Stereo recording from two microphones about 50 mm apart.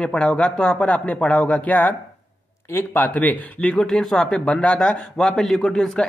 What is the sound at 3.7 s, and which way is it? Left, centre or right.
A man's voice, centre.